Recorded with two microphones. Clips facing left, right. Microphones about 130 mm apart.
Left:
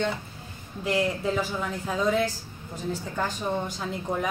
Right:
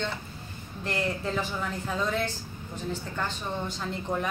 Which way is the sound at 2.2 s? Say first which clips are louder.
Left 3 dB; 40° left (ahead or behind).